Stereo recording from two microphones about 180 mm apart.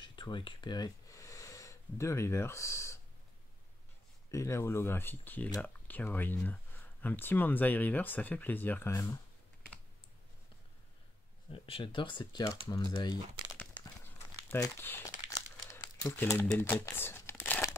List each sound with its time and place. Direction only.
0.0 s a sound: 25° left (ahead or behind)
4.3 s speech: 15° left (ahead or behind)
11.5 s speech: 30° left (ahead or behind)
13.6 s crumpling: 10° left (ahead or behind)
16.0 s speech: 10° left (ahead or behind)